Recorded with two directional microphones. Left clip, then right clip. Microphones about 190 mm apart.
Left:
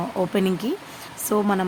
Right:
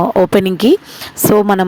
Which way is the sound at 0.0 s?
50° right (ahead or behind).